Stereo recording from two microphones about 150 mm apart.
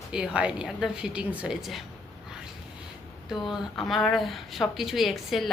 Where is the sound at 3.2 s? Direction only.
Centre (ahead or behind).